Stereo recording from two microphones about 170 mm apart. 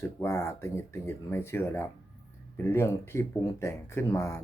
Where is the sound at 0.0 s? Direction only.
15° left (ahead or behind).